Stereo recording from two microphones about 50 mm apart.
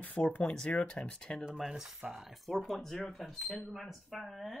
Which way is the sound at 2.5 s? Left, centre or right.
Centre.